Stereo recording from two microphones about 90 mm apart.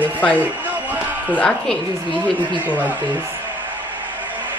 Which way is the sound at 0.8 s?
20° right (ahead or behind).